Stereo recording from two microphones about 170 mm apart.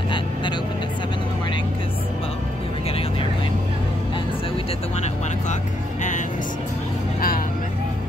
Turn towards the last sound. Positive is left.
turn(degrees=60)  # may be behind; listen again after turning